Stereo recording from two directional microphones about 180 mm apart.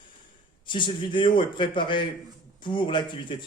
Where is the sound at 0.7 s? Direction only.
25° left (ahead or behind).